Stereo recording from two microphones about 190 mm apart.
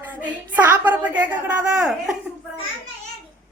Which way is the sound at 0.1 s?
10° right (ahead or behind).